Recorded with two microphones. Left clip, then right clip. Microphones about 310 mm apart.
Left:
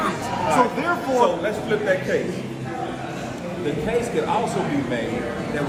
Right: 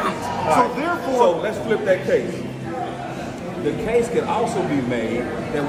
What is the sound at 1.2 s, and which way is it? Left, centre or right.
Speech, right.